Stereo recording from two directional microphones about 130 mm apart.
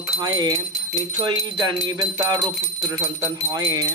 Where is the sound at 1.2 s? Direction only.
30° right (ahead or behind).